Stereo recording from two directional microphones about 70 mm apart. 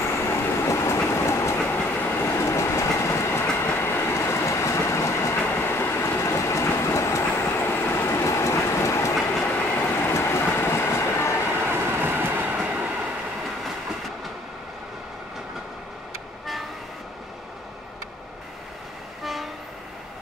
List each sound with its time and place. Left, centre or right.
0.2 s train: left
1.7 s train: left
6.0 s train: left
9.1 s train: centre
9.8 s train: left
11.6 s train: right
19.2 s train: centre